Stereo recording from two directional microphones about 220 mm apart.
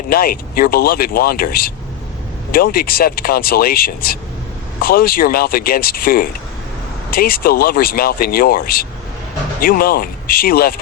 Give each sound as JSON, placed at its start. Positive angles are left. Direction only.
{"t": 0.1, "sound": "speech", "side_deg": 45}